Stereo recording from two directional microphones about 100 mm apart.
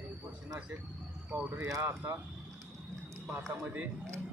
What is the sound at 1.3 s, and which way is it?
Speech, 15° right (ahead or behind).